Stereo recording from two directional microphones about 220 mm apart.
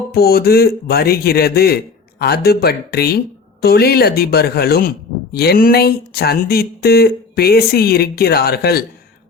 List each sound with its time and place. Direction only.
0.1 s speech: 45° left (ahead or behind)